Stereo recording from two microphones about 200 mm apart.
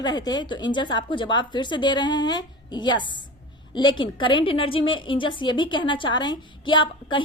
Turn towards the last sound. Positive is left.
turn(degrees=25)  # may be behind; listen again after turning